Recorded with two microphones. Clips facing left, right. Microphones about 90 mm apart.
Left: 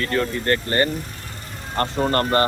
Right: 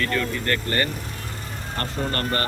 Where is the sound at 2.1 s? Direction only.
25° left (ahead or behind).